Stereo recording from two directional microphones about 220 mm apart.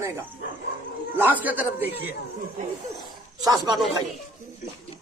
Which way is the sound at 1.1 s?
10° right (ahead or behind).